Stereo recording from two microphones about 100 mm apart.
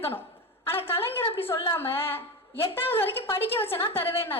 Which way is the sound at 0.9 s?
25° left (ahead or behind).